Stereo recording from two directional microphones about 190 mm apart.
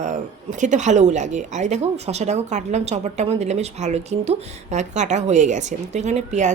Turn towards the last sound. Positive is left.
turn(degrees=-40)  # may be behind; listen again after turning